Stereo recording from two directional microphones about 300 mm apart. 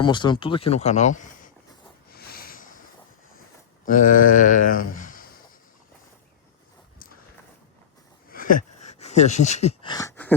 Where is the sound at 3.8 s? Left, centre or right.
Left.